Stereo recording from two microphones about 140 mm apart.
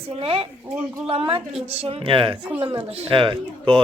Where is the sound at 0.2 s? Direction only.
45° right (ahead or behind).